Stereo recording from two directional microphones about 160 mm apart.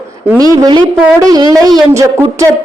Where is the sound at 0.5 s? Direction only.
25° right (ahead or behind).